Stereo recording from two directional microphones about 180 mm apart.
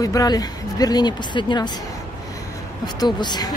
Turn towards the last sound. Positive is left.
turn(degrees=25)  # may be behind; listen again after turning